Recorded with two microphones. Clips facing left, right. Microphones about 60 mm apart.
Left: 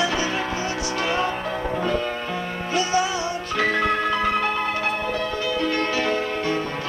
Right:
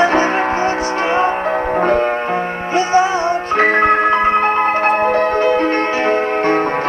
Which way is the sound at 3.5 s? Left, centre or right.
Right.